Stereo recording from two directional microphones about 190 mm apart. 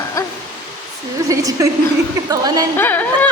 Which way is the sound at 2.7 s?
10° left (ahead or behind).